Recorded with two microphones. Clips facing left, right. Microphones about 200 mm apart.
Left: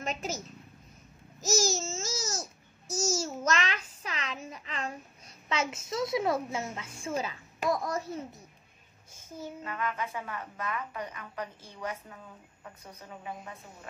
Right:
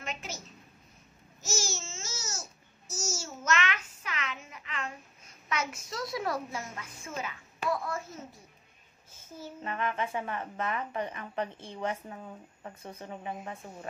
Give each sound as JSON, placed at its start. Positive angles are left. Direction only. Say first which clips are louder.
{"t": 0.0, "sound": "a woman's voice", "louder": "left 6 dB", "side_deg": 40}
{"t": 1.4, "sound": "babbling", "louder": "left 7 dB", "side_deg": 35}
{"t": 9.6, "sound": "a woman's voice", "louder": "right 3 dB", "side_deg": -25}